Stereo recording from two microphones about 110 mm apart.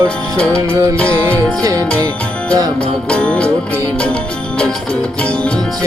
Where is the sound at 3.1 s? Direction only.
10° left (ahead or behind).